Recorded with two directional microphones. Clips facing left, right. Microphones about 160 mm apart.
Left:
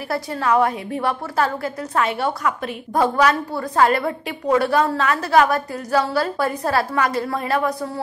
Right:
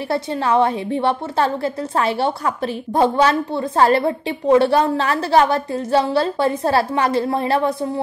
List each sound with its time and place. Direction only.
0.1 s a woman's voice: 25° right (ahead or behind)